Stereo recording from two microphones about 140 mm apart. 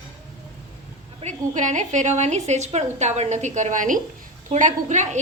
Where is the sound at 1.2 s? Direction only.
60° right (ahead or behind).